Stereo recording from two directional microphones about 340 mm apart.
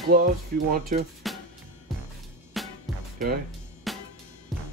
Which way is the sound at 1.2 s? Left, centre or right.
Centre.